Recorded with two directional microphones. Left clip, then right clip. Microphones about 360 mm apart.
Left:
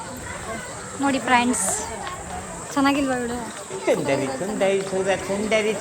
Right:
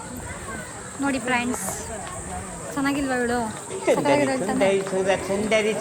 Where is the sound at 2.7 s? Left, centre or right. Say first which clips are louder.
Left 5 dB; centre.